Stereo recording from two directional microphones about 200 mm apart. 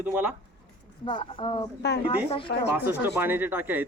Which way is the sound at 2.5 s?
55° left (ahead or behind).